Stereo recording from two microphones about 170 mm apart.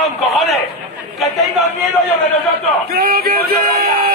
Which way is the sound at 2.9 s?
65° right (ahead or behind).